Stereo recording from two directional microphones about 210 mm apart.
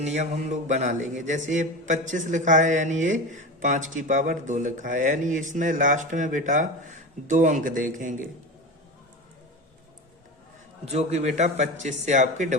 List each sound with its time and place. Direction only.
0.0 s a man's voice: 35° right (ahead or behind)
10.9 s a man's voice: 30° right (ahead or behind)